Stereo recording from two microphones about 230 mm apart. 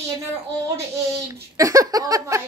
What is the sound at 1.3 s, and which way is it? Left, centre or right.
Speech, centre.